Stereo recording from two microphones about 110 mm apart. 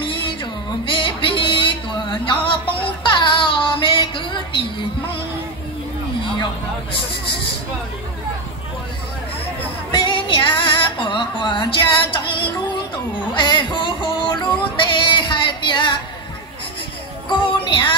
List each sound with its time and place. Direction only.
0.0 s a sound: 50° left (ahead or behind)
2.2 s music: 50° left (ahead or behind)
9.8 s music: 50° left (ahead or behind)
13.3 s a sound: 45° left (ahead or behind)
14.3 s female singing: 45° left (ahead or behind)
17.3 s music: 45° left (ahead or behind)